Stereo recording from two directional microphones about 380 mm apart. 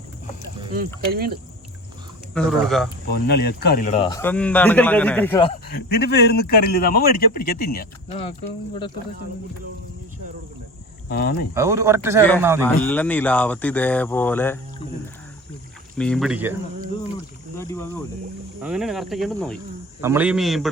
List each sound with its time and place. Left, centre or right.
2.3 s speech: centre
3.1 s speech: left; by 5.5 s centre
5.6 s a man's voice: left
11.1 s a man's voice: left
11.5 s a man's voice: centre
12.6 s speech: centre
16.0 s speech: centre
17.6 s speech: centre